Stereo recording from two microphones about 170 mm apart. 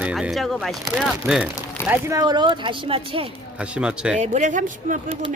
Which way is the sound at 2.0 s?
20° right (ahead or behind).